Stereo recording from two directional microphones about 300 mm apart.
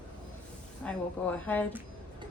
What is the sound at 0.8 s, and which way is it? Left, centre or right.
Speech, centre.